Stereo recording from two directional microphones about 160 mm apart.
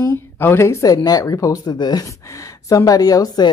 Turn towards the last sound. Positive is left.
turn(degrees=25)  # may be behind; listen again after turning